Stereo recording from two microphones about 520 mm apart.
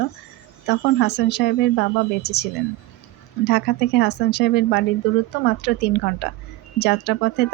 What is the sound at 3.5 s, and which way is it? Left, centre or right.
Speech, centre.